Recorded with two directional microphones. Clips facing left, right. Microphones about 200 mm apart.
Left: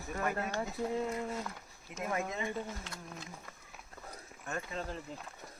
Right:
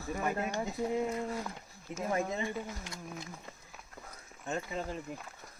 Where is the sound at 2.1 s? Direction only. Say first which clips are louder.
Right 3 dB; 30° right (ahead or behind).